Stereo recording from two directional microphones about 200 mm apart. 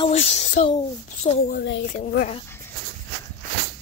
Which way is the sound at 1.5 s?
55° left (ahead or behind).